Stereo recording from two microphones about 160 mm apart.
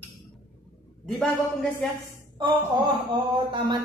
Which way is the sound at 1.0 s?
5° left (ahead or behind).